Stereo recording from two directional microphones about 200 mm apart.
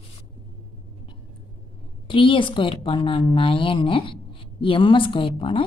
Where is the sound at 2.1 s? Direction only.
25° left (ahead or behind).